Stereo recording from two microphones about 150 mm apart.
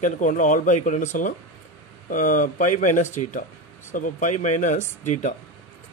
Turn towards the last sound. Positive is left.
turn(degrees=55)  # may be behind; listen again after turning